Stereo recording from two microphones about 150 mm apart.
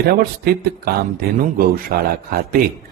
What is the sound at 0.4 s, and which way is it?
Speech, 90° right.